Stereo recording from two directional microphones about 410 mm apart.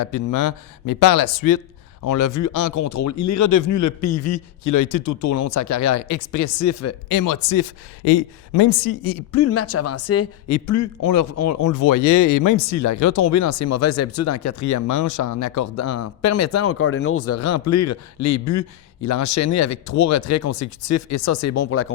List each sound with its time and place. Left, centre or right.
0.0 s speech: left
7.1 s speech: left
8.0 s a man's voice: left
9.4 s speech: left